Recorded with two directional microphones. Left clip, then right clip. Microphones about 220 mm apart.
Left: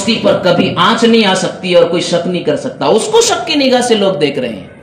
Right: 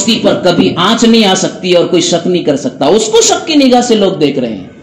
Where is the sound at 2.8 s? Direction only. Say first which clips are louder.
Right 2 dB; 15° left (ahead or behind).